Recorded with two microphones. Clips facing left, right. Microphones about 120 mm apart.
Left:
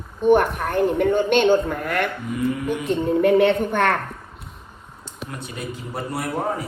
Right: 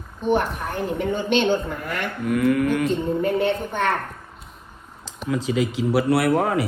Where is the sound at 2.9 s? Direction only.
65° left (ahead or behind).